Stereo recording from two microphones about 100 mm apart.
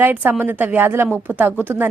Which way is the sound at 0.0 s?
20° right (ahead or behind).